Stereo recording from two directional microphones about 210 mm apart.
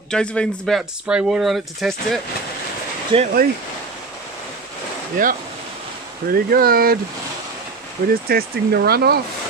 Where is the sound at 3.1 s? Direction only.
25° right (ahead or behind).